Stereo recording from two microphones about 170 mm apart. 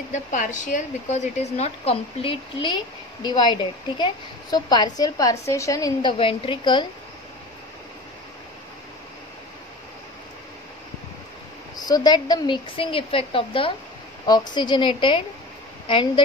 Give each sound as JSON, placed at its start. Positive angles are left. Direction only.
{"t": 0.1, "sound": "a woman's voice", "side_deg": 45}
{"t": 6.1, "sound": "speech", "side_deg": 30}
{"t": 11.7, "sound": "a woman's voice", "side_deg": 20}